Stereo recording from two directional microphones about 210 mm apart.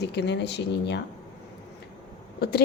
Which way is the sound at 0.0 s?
55° left (ahead or behind).